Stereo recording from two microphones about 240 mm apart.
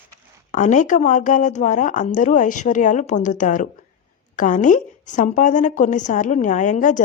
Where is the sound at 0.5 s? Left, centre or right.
Left.